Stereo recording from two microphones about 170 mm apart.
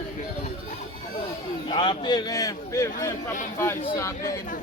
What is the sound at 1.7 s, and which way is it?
A man's voice, 25° left (ahead or behind).